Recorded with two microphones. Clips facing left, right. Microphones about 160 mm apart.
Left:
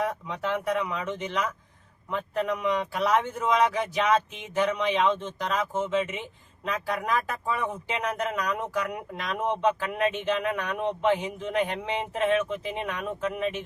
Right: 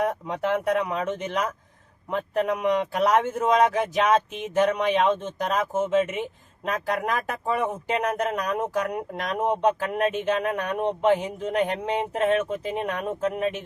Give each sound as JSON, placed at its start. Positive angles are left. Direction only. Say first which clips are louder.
{"t": 0.3, "sound": "speech", "louder": "right 4 dB", "side_deg": -50}